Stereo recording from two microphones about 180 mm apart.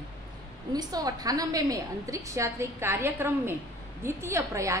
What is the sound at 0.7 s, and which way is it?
A woman's voice, 20° right (ahead or behind).